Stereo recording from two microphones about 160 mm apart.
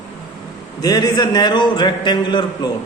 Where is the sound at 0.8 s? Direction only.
25° left (ahead or behind).